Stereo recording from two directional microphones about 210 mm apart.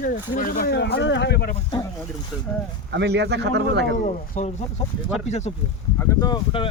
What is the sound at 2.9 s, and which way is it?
Speech, 55° right (ahead or behind).